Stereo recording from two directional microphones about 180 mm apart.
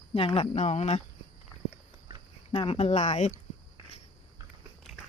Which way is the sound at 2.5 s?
30° left (ahead or behind).